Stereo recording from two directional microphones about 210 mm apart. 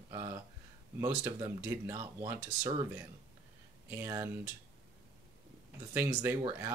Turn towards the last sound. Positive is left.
turn(degrees=-15)  # may be behind; listen again after turning